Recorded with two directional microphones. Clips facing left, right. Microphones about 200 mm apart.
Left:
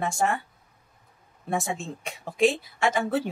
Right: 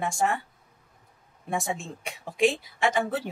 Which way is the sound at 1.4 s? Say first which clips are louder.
Left 1 dB; 15° right (ahead or behind).